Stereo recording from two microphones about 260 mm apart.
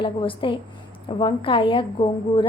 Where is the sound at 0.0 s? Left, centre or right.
Centre.